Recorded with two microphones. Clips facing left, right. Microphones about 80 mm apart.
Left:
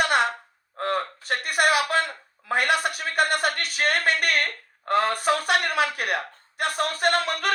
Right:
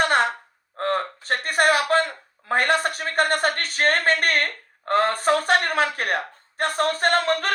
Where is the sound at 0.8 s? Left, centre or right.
Right.